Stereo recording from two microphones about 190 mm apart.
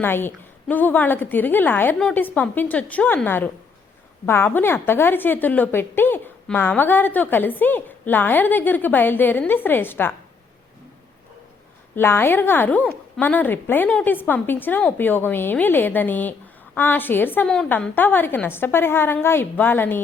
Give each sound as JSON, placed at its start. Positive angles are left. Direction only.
{"t": 0.0, "sound": "a woman's voice", "side_deg": 10}
{"t": 11.9, "sound": "a woman's voice", "side_deg": 10}